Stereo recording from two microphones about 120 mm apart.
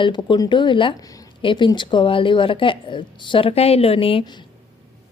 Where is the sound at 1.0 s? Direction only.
30° left (ahead or behind).